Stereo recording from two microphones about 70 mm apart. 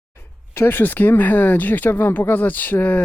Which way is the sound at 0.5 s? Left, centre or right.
Left.